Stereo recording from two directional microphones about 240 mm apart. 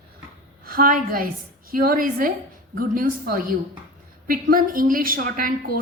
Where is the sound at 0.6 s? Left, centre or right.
Right.